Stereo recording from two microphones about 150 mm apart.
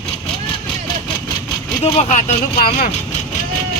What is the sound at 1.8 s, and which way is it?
Speech, 50° left (ahead or behind).